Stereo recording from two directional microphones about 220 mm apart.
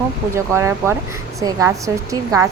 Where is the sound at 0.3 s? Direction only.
10° right (ahead or behind).